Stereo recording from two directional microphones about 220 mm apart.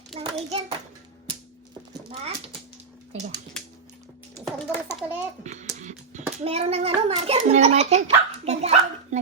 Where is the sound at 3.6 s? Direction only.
5° left (ahead or behind).